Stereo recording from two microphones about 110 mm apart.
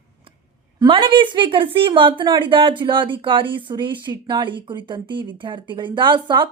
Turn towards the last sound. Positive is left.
turn(degrees=-50)  # may be behind; listen again after turning